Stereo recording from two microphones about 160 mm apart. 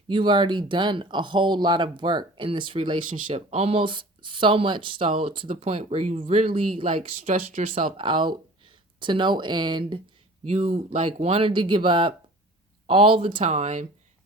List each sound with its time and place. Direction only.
0.1 s speech: 30° right (ahead or behind)
7.3 s speech: 55° right (ahead or behind)
7.8 s speech: 35° right (ahead or behind)
10.5 s speech: 45° right (ahead or behind)